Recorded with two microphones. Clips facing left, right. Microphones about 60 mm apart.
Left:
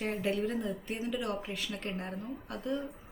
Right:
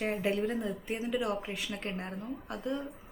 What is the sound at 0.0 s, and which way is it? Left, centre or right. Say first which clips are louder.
Speech: right 1 dB; centre.